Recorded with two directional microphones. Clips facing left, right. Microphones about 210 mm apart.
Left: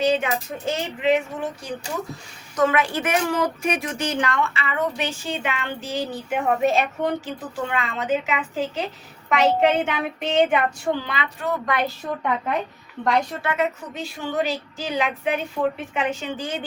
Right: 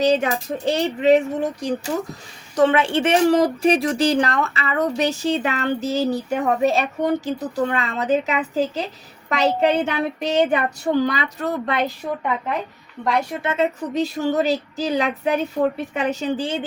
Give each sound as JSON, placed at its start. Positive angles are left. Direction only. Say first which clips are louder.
{"t": 0.0, "sound": "speech", "louder": "right 3 dB", "side_deg": -40}
{"t": 11.7, "sound": "a woman's voice", "louder": "right 1 dB", "side_deg": -20}
{"t": 13.0, "sound": "a woman's voice", "louder": "even", "side_deg": -10}
{"t": 13.3, "sound": "a woman's voice", "louder": "right 3 dB", "side_deg": -20}
{"t": 13.9, "sound": "speech", "louder": "right 6 dB", "side_deg": -40}